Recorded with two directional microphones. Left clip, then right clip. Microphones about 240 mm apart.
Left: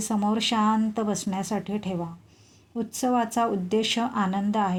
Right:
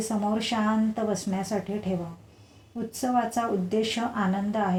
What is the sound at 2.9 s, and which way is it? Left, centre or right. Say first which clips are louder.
A woman's voice: left 2 dB; left.